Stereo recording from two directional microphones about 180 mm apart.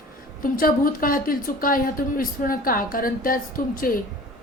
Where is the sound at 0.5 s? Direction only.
50° left (ahead or behind).